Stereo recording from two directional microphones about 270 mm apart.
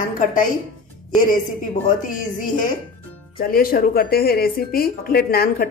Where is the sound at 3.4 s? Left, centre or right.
Left.